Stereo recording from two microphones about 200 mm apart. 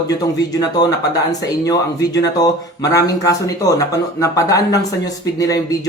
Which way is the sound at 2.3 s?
20° left (ahead or behind).